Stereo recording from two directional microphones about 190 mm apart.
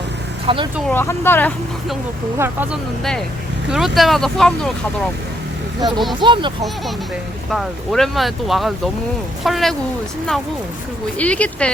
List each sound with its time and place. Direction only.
0.4 s speech: 25° right (ahead or behind)
0.9 s speech: 10° left (ahead or behind)
3.0 s speech: centre (ahead or behind)
5.8 s speech: centre (ahead or behind)
6.1 s speech: 25° right (ahead or behind)
7.5 s speech: centre (ahead or behind)
11.2 s speech: 5° left (ahead or behind)